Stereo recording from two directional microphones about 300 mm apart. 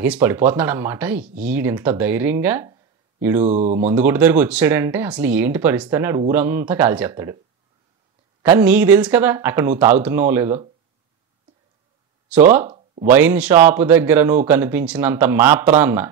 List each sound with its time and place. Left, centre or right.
0.0 s speech: centre
3.4 s speech: right
3.9 s speech: centre
8.4 s speech: centre
12.3 s speech: centre
12.6 s a sound: right
13.1 s speech: centre